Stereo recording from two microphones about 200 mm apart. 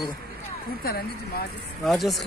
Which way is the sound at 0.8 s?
50° left (ahead or behind).